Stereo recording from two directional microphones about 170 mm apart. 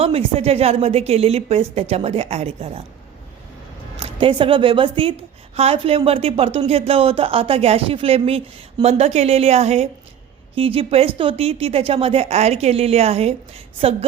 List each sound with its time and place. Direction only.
0.0 s a woman's voice: 35° right (ahead or behind)
4.0 s a woman's voice: 30° right (ahead or behind)